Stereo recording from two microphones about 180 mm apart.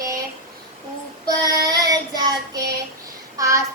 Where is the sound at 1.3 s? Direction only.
20° right (ahead or behind).